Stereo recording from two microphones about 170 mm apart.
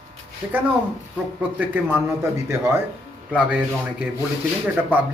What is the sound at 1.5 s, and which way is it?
Speech, 10° right (ahead or behind).